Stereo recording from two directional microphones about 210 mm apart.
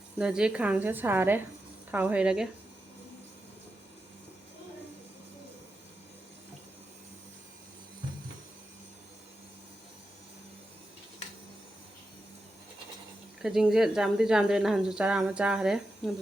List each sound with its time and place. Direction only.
0.2 s a woman's voice: 5° right (ahead or behind)
13.4 s speech: centre (ahead or behind)